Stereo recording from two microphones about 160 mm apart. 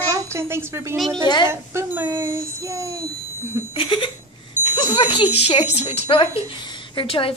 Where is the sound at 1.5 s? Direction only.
15° right (ahead or behind).